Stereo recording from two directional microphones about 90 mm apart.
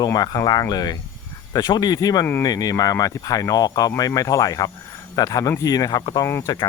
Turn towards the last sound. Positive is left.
turn(degrees=50)  # may be behind; listen again after turning